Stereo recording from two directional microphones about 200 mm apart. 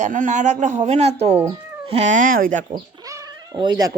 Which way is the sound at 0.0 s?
40° right (ahead or behind).